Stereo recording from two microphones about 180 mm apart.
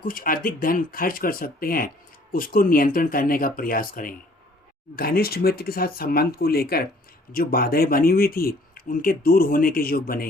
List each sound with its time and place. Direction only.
0.0 s speech: 50° left (ahead or behind)